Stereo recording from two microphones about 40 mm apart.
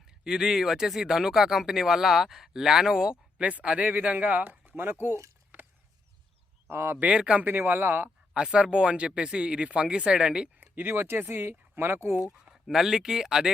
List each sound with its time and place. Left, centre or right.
0.1 s speech: centre
3.4 s speech: right
4.4 s a sound: right
6.7 s speech: right
7.0 s speech: right
7.4 s speech: right
8.3 s speech: right
10.6 s a sound: right
10.9 s speech: right
12.7 s speech: centre